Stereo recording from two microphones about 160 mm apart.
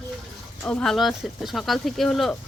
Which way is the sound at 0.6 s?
5° left (ahead or behind).